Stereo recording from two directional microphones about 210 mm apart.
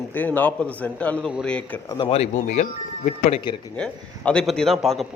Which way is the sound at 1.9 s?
25° left (ahead or behind).